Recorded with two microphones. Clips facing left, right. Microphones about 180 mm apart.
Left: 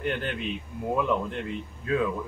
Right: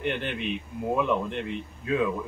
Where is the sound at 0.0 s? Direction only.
Centre (ahead or behind).